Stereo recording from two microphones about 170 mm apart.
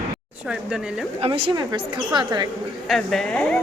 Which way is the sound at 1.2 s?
30° right (ahead or behind).